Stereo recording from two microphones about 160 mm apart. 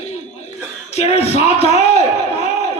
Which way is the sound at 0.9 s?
40° left (ahead or behind).